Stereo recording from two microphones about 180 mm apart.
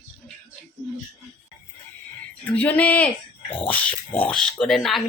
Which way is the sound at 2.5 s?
10° left (ahead or behind).